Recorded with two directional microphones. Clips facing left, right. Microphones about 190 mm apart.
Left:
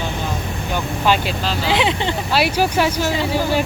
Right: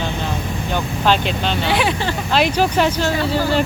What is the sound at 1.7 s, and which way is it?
Speech, 20° left (ahead or behind).